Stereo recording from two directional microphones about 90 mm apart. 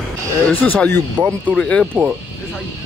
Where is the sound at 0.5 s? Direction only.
20° left (ahead or behind).